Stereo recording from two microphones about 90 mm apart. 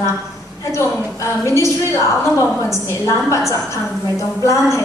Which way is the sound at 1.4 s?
35° left (ahead or behind).